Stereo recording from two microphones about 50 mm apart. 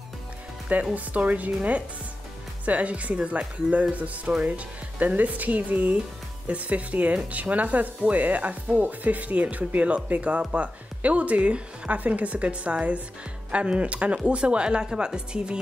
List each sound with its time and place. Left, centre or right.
0.9 s a woman's voice: right